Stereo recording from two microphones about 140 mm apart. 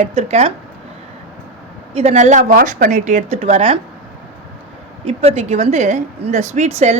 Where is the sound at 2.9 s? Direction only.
60° right (ahead or behind).